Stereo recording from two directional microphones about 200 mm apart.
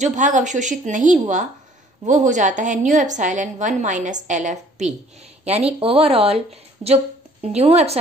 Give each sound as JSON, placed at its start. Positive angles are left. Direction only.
{"t": 0.0, "sound": "a woman's voice", "side_deg": -40}